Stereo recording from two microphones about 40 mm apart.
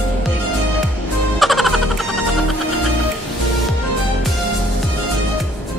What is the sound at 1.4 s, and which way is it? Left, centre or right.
Music, centre.